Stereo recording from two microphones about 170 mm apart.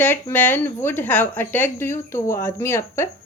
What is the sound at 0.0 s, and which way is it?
Speech, 10° left (ahead or behind).